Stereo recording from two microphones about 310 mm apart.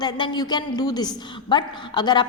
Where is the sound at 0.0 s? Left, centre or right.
Centre.